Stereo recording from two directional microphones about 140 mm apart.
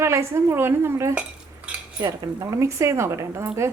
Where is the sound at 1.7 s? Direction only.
20° right (ahead or behind).